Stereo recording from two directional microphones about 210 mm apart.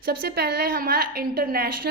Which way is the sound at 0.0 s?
50° right (ahead or behind).